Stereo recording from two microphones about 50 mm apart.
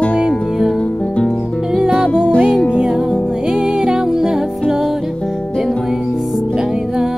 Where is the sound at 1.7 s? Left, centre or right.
Centre.